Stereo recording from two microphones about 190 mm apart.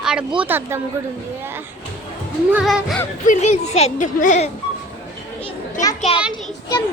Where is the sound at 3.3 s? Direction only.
35° left (ahead or behind).